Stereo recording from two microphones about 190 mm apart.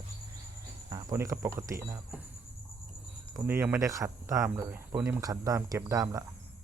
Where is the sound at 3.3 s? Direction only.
15° right (ahead or behind).